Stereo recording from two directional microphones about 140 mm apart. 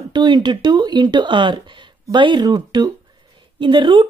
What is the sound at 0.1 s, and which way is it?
Speech, 30° right (ahead or behind).